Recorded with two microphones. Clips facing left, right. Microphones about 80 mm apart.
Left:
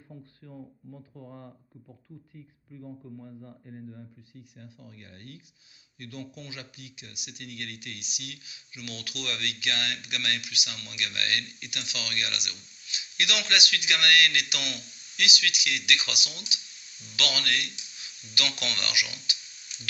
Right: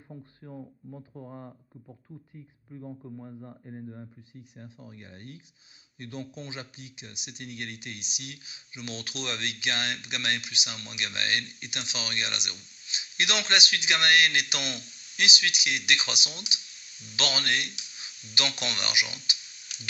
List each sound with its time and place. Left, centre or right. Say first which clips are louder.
0.1 s speech: right 3 dB; right
19.7 s frying: right 1 dB; right